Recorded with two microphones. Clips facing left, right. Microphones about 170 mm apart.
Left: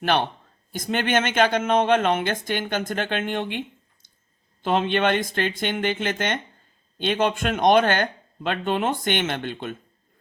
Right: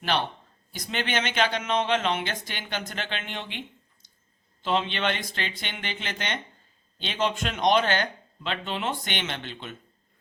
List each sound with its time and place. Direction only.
0.0 s speech: 50° left (ahead or behind)
4.6 s speech: 50° left (ahead or behind)